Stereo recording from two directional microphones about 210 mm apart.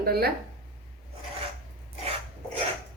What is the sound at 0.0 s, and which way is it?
Speech, 45° right (ahead or behind).